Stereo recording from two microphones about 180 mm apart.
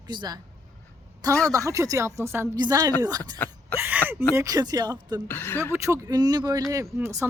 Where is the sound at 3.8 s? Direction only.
10° right (ahead or behind).